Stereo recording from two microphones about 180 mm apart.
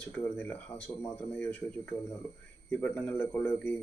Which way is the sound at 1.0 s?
10° left (ahead or behind).